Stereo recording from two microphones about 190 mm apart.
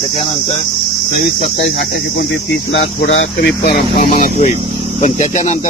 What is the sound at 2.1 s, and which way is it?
Speech, 70° left (ahead or behind).